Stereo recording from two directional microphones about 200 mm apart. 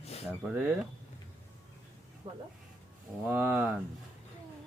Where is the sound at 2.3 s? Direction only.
30° right (ahead or behind).